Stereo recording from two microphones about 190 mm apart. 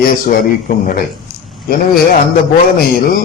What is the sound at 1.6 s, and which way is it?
Speech, 50° left (ahead or behind).